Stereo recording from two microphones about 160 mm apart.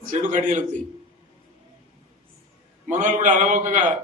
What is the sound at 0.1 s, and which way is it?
Speech, 50° right (ahead or behind).